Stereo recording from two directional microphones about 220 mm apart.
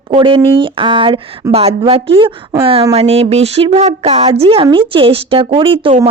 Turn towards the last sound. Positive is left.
turn(degrees=-25)  # may be behind; listen again after turning